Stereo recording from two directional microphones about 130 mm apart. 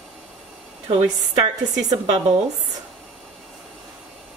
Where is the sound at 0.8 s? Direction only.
50° right (ahead or behind).